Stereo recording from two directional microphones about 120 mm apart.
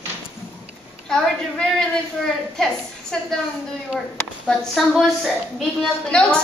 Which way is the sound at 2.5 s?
5° left (ahead or behind).